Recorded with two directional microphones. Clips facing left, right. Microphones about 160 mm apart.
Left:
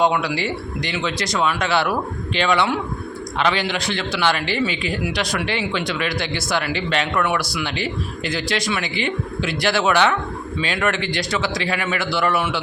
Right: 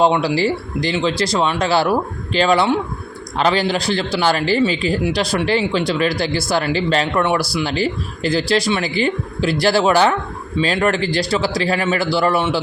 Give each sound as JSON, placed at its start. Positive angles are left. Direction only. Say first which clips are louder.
{"t": 0.0, "sound": "a man's voice", "louder": "right 4 dB", "side_deg": -30}